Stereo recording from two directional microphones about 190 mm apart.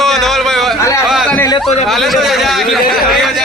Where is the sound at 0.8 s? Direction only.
15° left (ahead or behind).